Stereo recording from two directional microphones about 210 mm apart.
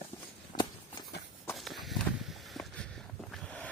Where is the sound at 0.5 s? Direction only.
40° left (ahead or behind).